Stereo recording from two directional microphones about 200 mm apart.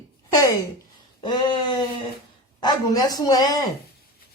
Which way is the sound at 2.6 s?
20° left (ahead or behind).